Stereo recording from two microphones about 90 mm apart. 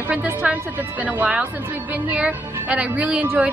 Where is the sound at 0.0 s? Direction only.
20° right (ahead or behind).